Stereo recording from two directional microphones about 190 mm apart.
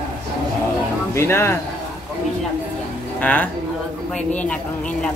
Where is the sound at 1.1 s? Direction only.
15° left (ahead or behind).